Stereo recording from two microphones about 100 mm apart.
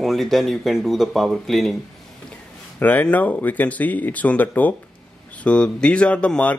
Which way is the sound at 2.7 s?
15° left (ahead or behind).